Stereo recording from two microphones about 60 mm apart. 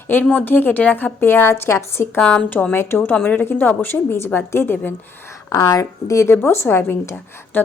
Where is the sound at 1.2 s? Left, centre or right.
Left.